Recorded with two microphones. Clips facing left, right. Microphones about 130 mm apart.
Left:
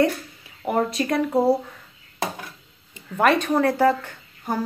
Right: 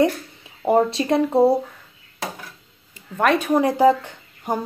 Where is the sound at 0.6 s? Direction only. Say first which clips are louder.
Right 5 dB; 30° right (ahead or behind).